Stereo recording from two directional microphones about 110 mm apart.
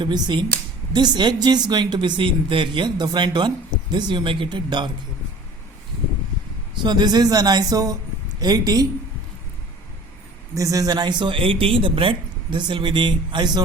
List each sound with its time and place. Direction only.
0.0 s speech: 45° right (ahead or behind)
6.8 s speech: 40° right (ahead or behind)
10.5 s speech: 30° right (ahead or behind)